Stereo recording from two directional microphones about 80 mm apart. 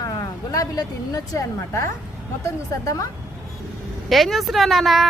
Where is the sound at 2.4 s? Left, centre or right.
Left.